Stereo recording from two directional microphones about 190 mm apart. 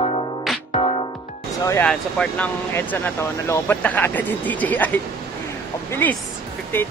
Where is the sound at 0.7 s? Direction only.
25° left (ahead or behind).